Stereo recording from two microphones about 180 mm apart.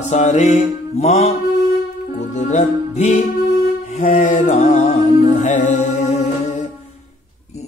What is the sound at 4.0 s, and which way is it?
Mantra, 45° left (ahead or behind).